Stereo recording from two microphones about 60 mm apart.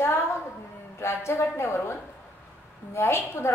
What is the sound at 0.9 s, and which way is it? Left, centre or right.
A woman's voice, left.